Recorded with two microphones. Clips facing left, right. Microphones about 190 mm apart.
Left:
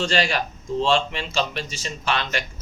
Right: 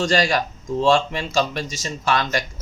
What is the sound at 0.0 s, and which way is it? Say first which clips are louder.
Speech: right 3 dB; 40° right (ahead or behind).